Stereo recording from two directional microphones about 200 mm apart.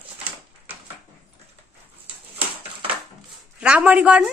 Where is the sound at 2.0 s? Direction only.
30° right (ahead or behind).